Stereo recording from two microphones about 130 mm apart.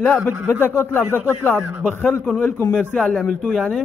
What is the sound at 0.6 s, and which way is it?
Speech, 20° left (ahead or behind).